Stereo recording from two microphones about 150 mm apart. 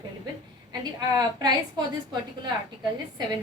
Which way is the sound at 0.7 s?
25° right (ahead or behind).